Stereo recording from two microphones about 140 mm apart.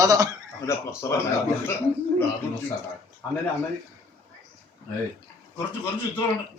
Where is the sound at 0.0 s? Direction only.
25° right (ahead or behind).